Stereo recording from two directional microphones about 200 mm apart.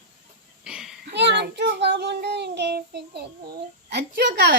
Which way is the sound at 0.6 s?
5° right (ahead or behind).